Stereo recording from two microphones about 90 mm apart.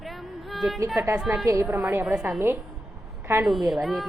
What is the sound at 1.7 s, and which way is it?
A woman's voice, 20° right (ahead or behind).